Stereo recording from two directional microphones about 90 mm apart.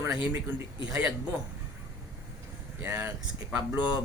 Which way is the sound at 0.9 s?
15° right (ahead or behind).